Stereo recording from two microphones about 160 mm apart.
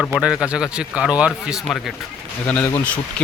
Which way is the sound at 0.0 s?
5° right (ahead or behind).